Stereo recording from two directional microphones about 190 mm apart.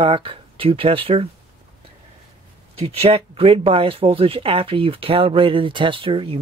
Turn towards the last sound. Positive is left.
turn(degrees=-30)  # may be behind; listen again after turning